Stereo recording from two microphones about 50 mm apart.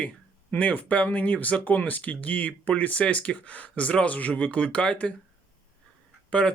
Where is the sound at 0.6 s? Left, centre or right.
Left.